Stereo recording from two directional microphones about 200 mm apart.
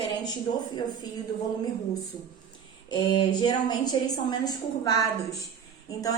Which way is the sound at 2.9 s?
25° left (ahead or behind).